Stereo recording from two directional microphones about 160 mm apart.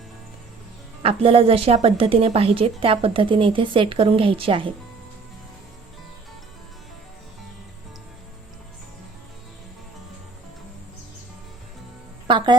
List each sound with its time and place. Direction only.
1.0 s a woman's voice: 35° right (ahead or behind)